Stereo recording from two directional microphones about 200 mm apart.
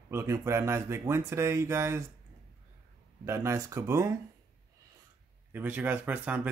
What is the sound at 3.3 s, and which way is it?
Speech, 15° right (ahead or behind).